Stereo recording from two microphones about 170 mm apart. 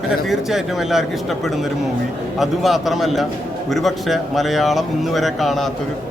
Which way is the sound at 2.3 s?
Centre (ahead or behind).